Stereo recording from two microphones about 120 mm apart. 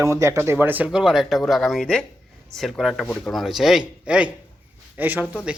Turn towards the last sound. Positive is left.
turn(degrees=-15)  # may be behind; listen again after turning